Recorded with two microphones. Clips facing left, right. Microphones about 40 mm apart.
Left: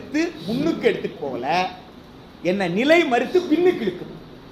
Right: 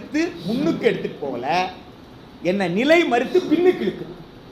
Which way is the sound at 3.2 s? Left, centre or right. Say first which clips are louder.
Right 1 dB; right.